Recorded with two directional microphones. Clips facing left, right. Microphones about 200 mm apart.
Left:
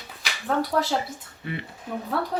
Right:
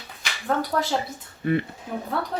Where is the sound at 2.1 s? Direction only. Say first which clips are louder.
Left 2 dB; centre (ahead or behind).